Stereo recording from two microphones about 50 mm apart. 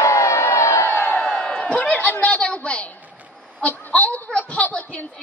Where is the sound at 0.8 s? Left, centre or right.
Left.